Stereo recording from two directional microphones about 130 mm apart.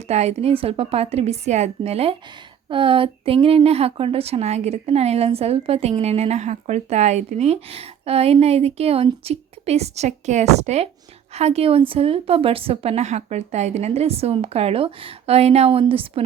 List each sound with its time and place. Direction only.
0.1 s a woman's voice: 55° right (ahead or behind)